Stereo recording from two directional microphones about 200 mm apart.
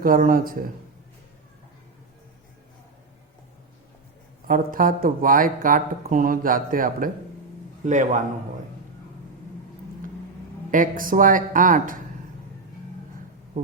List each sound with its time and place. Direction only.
0.0 s speech: 45° right (ahead or behind)
4.4 s speech: 45° right (ahead or behind)
10.7 s speech: 45° right (ahead or behind)